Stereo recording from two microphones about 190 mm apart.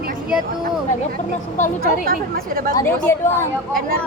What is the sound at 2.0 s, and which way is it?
Speech, 50° right (ahead or behind).